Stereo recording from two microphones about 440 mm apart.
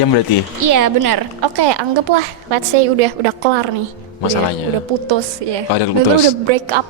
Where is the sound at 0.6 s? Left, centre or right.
Right.